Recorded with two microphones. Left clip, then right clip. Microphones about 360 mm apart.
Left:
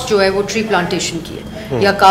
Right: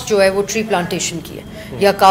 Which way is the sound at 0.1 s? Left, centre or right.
Right.